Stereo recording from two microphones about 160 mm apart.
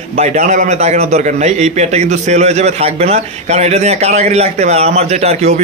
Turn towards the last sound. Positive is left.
turn(degrees=-40)  # may be behind; listen again after turning